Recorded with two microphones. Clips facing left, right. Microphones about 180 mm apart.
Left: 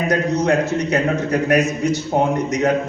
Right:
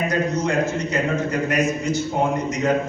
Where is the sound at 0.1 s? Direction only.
70° left (ahead or behind).